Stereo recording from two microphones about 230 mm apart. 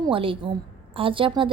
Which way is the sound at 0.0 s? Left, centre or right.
Right.